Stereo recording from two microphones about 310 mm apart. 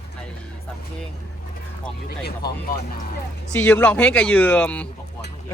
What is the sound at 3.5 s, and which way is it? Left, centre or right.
Speech, centre.